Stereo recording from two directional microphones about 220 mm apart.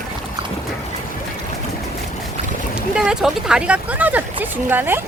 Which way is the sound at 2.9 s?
5° right (ahead or behind).